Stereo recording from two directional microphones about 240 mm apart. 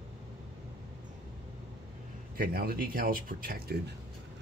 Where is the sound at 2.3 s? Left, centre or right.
Right.